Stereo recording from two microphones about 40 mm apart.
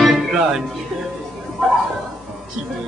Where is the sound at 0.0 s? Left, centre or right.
Centre.